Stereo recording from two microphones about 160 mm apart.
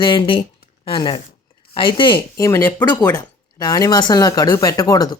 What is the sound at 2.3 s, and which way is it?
Speech, 20° left (ahead or behind).